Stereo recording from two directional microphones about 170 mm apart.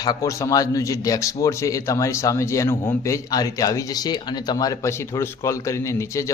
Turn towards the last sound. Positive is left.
turn(degrees=15)  # may be behind; listen again after turning